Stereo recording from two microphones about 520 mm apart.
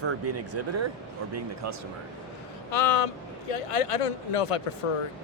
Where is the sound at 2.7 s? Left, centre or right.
Left.